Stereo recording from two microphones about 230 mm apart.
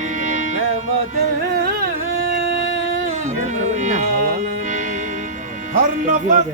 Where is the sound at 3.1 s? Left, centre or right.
Right.